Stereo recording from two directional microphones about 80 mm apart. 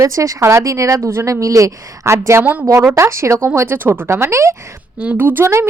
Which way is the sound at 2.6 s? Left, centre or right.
Right.